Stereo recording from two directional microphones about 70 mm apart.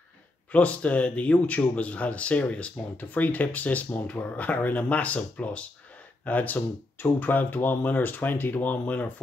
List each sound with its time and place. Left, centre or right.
0.5 s a man's voice: left